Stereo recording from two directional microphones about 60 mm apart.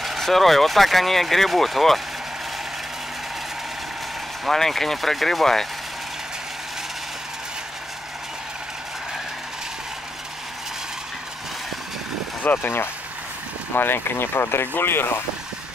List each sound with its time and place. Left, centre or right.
0.0 s speech: centre
4.5 s speech: centre
12.4 s speech: left